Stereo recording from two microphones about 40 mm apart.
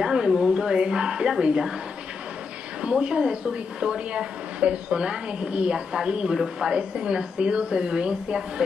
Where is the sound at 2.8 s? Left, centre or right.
Right.